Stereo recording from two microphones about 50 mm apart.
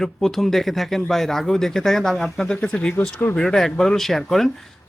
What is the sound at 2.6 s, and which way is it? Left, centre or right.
Speech, left.